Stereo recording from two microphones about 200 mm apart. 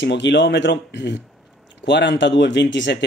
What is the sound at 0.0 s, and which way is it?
Speech, 60° left (ahead or behind).